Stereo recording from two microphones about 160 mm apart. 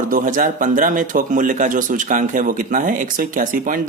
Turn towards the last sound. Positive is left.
turn(degrees=-60)  # may be behind; listen again after turning